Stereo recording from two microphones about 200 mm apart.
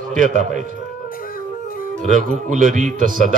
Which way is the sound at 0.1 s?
40° right (ahead or behind).